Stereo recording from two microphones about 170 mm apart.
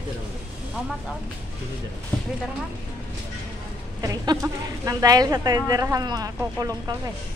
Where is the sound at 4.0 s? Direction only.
20° right (ahead or behind).